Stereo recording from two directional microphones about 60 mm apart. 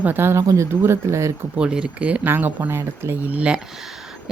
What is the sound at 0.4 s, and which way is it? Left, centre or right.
Speech, right.